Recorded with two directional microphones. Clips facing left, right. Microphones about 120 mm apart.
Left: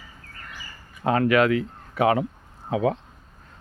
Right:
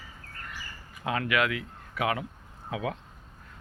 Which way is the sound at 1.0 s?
40° left (ahead or behind).